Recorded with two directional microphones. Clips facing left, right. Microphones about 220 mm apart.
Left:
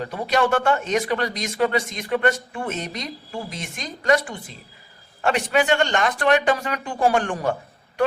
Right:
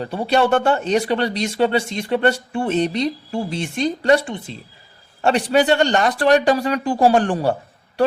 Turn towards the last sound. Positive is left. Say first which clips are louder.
# right 5 dB
turn(degrees=-35)  # may be behind; listen again after turning